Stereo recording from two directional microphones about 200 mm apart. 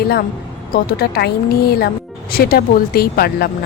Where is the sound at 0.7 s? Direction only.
50° left (ahead or behind).